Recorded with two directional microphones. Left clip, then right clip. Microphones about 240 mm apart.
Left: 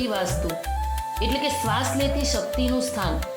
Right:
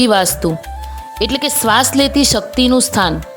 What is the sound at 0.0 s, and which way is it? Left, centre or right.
Speech, right.